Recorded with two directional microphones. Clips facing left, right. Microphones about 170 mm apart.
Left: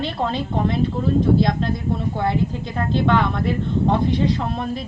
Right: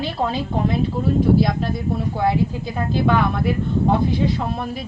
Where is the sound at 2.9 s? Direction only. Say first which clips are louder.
Even; 5° right (ahead or behind).